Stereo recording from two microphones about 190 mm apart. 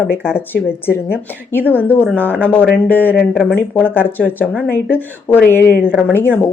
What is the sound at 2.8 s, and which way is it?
Speech, 10° left (ahead or behind).